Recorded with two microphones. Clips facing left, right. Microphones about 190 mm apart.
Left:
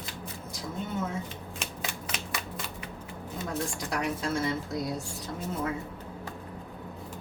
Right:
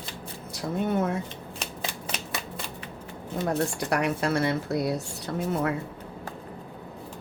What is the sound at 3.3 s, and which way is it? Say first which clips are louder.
Speech: right 7 dB; 65° right (ahead or behind).